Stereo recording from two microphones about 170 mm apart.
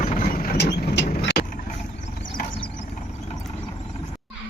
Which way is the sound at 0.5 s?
85° left.